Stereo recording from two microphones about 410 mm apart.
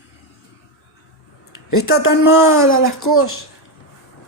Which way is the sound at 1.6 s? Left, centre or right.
Left.